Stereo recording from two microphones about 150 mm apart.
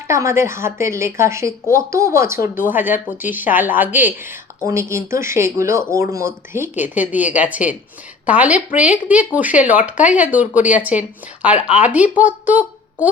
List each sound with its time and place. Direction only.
0.1 s a woman's voice: 20° right (ahead or behind)